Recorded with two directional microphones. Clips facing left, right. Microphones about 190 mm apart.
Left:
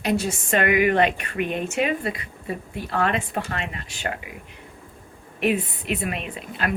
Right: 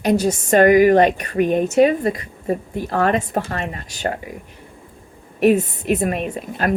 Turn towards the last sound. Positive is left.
turn(degrees=-45)  # may be behind; listen again after turning